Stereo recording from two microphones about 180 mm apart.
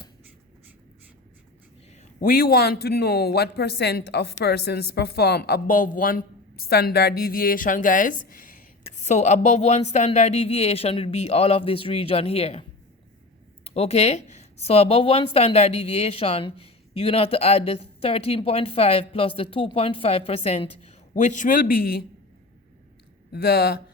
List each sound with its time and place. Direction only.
2.0 s a man's voice: 55° left (ahead or behind); by 12.6 s 35° left (ahead or behind)
13.7 s a woman's voice: 35° left (ahead or behind); by 22.0 s 55° left (ahead or behind)
23.3 s speech: 60° left (ahead or behind)